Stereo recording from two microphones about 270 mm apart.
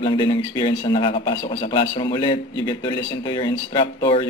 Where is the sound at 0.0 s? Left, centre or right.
Centre.